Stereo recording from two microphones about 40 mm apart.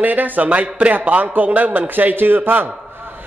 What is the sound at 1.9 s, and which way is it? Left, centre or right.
Speech, right.